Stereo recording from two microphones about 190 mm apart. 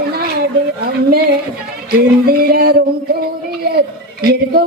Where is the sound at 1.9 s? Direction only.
55° right (ahead or behind).